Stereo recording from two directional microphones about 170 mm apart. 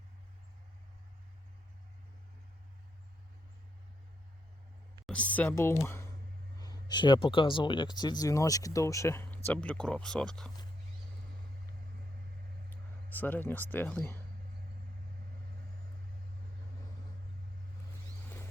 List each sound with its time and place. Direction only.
5.0 s speech: 5° left (ahead or behind)
12.7 s speech: 10° left (ahead or behind)